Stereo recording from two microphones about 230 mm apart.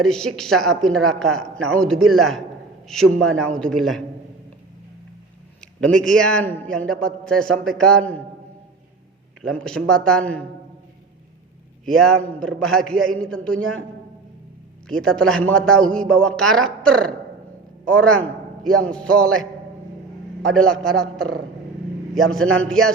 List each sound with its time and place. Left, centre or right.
0.0 s a man's voice: centre
5.5 s a man's voice: centre
9.6 s a man's voice: centre
11.9 s a man's voice: centre
14.8 s a man's voice: centre
20.6 s a man's voice: centre